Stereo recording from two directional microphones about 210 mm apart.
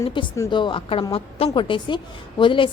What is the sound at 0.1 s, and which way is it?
A woman's voice, 20° left (ahead or behind).